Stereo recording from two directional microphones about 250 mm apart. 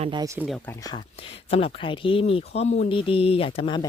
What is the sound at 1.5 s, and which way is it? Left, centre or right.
Speech, left.